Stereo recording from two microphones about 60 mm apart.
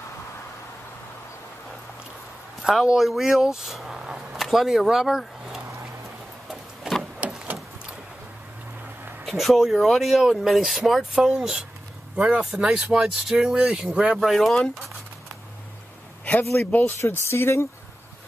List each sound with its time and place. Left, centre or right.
2.6 s speech: centre
6.5 s a sound: centre
9.2 s speech: centre
12.8 s speech: centre
14.1 s speech: centre
16.7 s speech: left
17.0 s speech: left